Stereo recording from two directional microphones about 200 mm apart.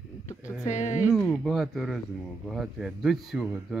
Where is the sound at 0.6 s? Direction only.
35° left (ahead or behind).